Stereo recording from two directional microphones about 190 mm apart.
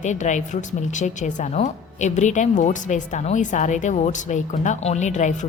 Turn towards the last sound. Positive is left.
turn(degrees=40)  # may be behind; listen again after turning